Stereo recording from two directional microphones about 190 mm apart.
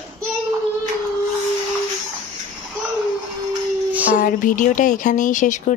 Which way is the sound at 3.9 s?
10° right (ahead or behind).